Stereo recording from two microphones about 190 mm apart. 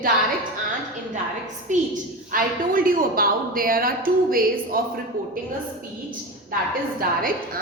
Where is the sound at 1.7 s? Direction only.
40° right (ahead or behind).